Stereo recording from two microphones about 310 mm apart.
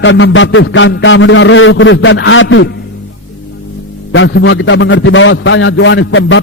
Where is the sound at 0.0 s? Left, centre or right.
Left.